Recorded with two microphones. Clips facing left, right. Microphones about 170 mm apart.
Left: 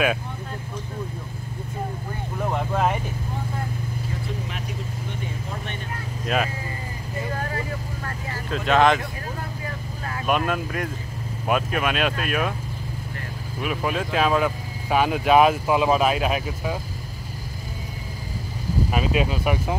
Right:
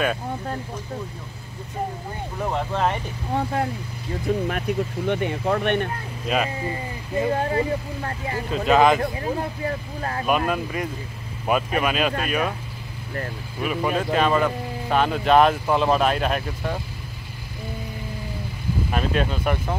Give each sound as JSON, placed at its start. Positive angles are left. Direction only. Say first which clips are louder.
{"t": 2.5, "sound": "speech", "louder": "even", "side_deg": 5}
{"t": 4.5, "sound": "speech", "louder": "right 8 dB", "side_deg": -60}
{"t": 6.2, "sound": "speech", "louder": "right 1 dB", "side_deg": 0}
{"t": 7.2, "sound": "speech", "louder": "right 7 dB", "side_deg": -25}
{"t": 8.6, "sound": "speech", "louder": "right 1 dB", "side_deg": -5}
{"t": 9.7, "sound": "speech", "louder": "right 5 dB", "side_deg": -40}
{"t": 10.2, "sound": "speech", "louder": "even", "side_deg": 0}
{"t": 13.6, "sound": "speech", "louder": "right 2 dB", "side_deg": 0}
{"t": 18.9, "sound": "speech", "louder": "even", "side_deg": 5}